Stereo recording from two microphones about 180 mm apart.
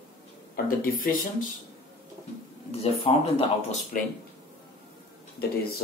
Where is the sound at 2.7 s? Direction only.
35° left (ahead or behind).